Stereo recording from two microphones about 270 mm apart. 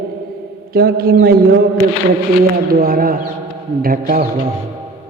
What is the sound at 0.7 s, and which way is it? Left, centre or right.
Speech, right.